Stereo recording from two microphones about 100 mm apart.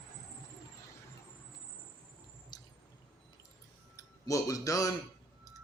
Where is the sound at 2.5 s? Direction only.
45° left (ahead or behind).